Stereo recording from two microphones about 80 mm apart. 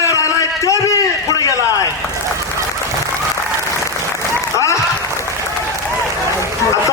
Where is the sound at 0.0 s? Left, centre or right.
Left.